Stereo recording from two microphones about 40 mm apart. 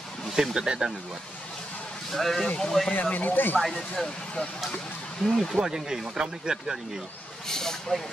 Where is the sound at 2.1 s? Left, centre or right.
Centre.